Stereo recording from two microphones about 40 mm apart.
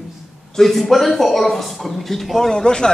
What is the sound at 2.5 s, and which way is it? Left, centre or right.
Speech, centre.